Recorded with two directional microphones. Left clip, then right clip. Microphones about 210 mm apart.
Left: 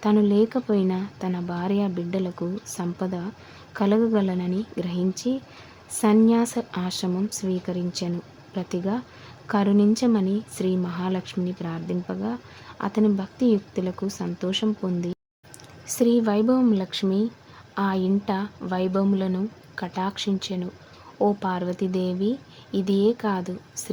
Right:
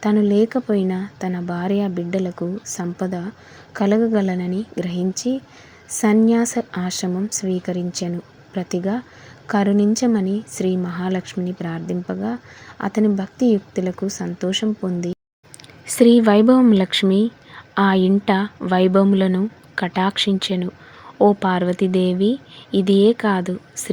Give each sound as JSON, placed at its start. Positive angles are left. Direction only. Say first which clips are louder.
{"t": 0.0, "sound": "a woman's voice", "louder": "right 3 dB", "side_deg": -10}